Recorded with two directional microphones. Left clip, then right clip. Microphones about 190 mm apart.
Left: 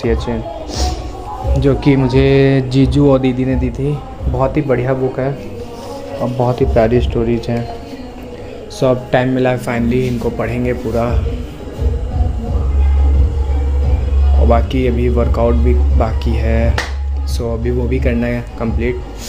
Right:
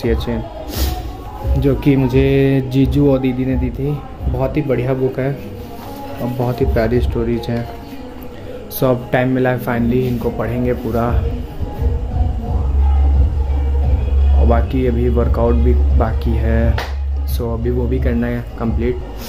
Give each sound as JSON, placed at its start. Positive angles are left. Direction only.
{"t": 0.0, "sound": "speech", "side_deg": -15}
{"t": 1.6, "sound": "speech", "side_deg": -10}
{"t": 6.4, "sound": "speech", "side_deg": -5}
{"t": 8.7, "sound": "speech", "side_deg": -10}
{"t": 14.5, "sound": "speech", "side_deg": -5}